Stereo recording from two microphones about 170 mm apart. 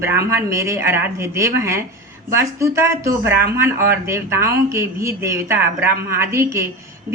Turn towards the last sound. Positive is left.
turn(degrees=-15)  # may be behind; listen again after turning